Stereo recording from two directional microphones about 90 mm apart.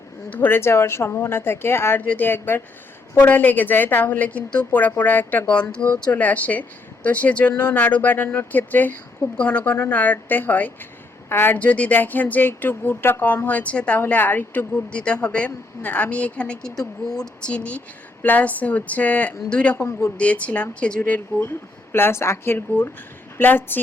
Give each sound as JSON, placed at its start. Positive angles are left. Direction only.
{"t": 0.3, "sound": "speech", "side_deg": 20}
{"t": 21.9, "sound": "speech", "side_deg": 25}